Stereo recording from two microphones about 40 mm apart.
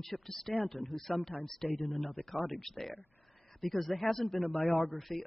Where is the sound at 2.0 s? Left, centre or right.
Left.